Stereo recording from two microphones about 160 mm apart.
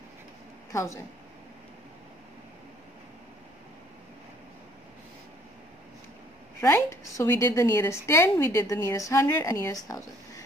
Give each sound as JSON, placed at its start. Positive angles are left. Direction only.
{"t": 0.7, "sound": "a woman's voice", "side_deg": 20}
{"t": 6.6, "sound": "a woman's voice", "side_deg": 15}